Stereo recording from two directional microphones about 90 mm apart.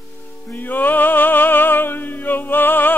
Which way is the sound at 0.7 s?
20° left (ahead or behind).